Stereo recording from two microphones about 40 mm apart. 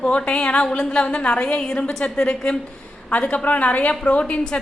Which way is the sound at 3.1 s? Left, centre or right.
Left.